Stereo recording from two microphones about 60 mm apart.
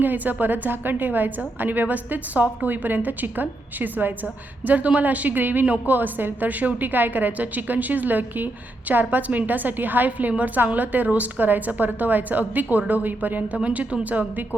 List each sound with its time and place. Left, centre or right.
0.0 s a woman's voice: right
13.6 s a woman's voice: centre